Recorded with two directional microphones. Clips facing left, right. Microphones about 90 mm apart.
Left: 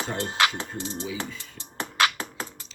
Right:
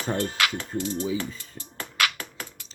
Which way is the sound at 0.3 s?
30° left (ahead or behind).